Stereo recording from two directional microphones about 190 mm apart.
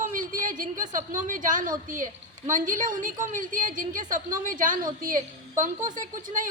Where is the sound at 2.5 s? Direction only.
45° right (ahead or behind).